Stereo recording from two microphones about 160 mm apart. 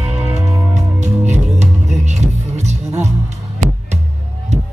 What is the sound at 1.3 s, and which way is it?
Music, 45° right (ahead or behind).